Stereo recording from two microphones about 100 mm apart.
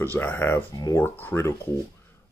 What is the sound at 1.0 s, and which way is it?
Speech, 20° left (ahead or behind).